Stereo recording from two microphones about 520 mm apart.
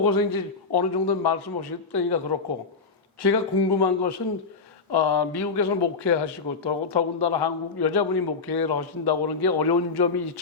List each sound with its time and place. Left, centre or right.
0.0 s speech: left
3.2 s speech: left